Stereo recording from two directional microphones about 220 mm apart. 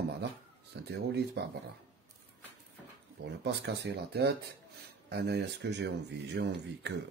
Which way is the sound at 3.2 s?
50° right (ahead or behind).